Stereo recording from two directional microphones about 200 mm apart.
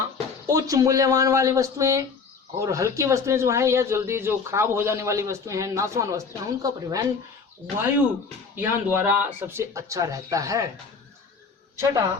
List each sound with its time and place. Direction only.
0.4 s speech: 15° right (ahead or behind)